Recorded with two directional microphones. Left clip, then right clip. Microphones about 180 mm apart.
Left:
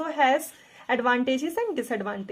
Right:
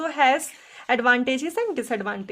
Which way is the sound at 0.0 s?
30° right (ahead or behind).